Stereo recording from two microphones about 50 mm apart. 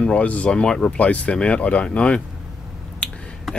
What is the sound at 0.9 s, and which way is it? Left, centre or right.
Speech, left.